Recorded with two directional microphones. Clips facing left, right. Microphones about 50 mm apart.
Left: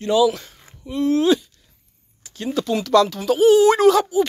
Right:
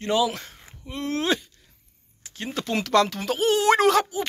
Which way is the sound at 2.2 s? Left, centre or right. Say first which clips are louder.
Left 7 dB; right.